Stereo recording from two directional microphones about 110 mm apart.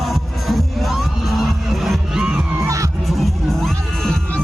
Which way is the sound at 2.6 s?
30° right (ahead or behind).